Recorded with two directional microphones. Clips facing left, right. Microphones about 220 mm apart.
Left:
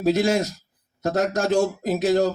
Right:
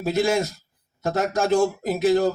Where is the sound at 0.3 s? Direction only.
50° right (ahead or behind).